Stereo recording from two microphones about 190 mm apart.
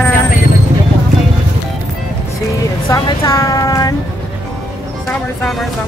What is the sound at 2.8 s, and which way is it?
A woman's voice, 20° left (ahead or behind).